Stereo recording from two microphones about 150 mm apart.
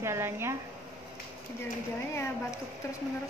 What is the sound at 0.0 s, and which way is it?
Speech, 15° right (ahead or behind).